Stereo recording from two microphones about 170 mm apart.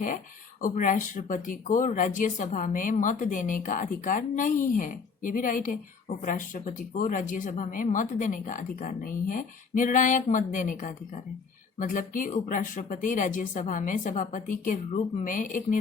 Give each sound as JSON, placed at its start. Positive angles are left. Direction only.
{"t": 0.6, "sound": "speech", "side_deg": 50}